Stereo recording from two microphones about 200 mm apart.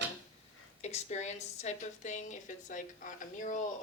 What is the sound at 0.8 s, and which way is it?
A woman's voice, 35° left (ahead or behind).